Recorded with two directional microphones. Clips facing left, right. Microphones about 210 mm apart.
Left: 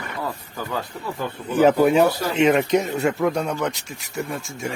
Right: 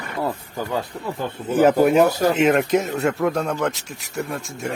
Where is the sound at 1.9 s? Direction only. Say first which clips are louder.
Right 2 dB; 45° right (ahead or behind).